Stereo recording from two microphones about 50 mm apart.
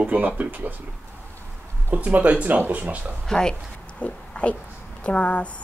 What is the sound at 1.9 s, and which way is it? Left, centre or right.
Speech, right.